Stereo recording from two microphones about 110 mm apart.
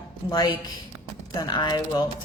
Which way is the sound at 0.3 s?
35° left (ahead or behind).